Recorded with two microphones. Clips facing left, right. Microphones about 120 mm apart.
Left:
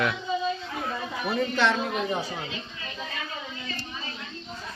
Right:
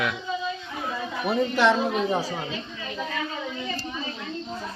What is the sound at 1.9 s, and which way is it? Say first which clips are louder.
Speech: right 4 dB; 35° right (ahead or behind).